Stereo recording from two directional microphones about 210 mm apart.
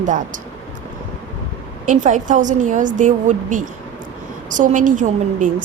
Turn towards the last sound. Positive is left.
turn(degrees=-35)  # may be behind; listen again after turning